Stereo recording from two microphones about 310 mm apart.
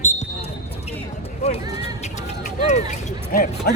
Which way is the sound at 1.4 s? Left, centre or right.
Centre.